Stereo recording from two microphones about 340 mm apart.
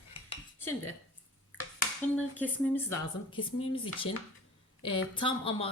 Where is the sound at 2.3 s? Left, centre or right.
Centre.